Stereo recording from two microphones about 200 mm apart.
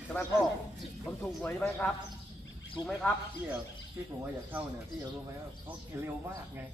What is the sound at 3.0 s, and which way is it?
Speech, 10° left (ahead or behind).